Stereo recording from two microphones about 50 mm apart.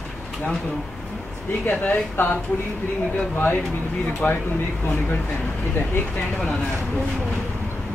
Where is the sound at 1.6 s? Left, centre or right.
Left.